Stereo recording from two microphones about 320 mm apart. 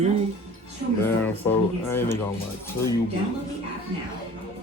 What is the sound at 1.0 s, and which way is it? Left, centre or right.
Speech, centre.